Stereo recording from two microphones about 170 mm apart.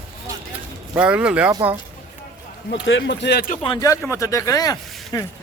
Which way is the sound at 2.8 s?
90° left.